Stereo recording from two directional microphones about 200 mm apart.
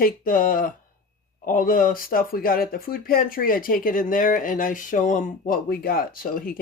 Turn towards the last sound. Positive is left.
turn(degrees=45)  # may be behind; listen again after turning